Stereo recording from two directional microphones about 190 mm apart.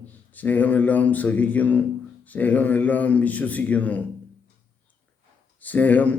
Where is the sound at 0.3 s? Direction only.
10° left (ahead or behind).